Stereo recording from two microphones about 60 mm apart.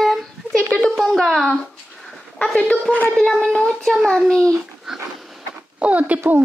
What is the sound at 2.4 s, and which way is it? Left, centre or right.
Speech, centre.